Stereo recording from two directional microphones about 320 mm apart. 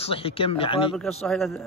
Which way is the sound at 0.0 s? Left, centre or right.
Centre.